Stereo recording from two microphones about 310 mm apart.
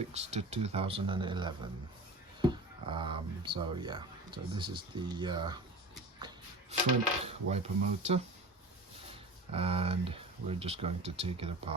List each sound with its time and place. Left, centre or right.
0.1 s speech: right
6.1 s a sound: centre
7.3 s speech: centre
9.5 s speech: centre